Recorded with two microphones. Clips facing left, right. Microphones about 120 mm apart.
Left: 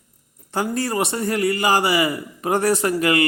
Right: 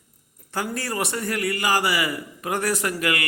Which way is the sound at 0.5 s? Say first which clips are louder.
Left 5 dB; 25° left (ahead or behind).